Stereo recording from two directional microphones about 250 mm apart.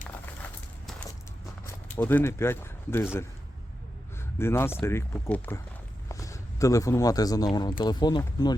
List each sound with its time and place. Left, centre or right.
2.0 s speech: centre
4.4 s speech: centre